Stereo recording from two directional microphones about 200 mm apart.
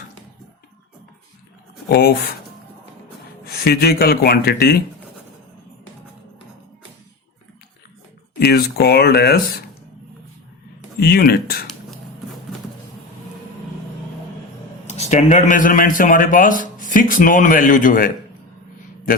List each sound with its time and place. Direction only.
1.9 s speech: 50° left (ahead or behind)
3.6 s speech: 50° left (ahead or behind)
8.4 s speech: 50° left (ahead or behind)
10.8 s speech: 50° left (ahead or behind)
14.8 s speech: 35° left (ahead or behind)